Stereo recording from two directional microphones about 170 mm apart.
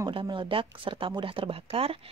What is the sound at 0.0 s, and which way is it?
Speech, 30° right (ahead or behind).